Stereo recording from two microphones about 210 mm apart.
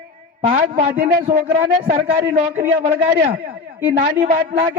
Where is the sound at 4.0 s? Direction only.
35° right (ahead or behind).